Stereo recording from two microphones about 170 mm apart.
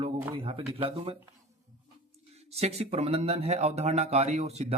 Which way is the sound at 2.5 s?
40° right (ahead or behind).